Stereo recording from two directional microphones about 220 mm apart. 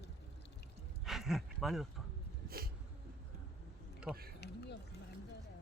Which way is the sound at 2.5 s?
45° right (ahead or behind).